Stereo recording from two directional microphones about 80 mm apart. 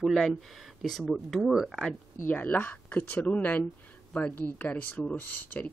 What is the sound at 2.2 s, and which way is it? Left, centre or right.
Speech, left.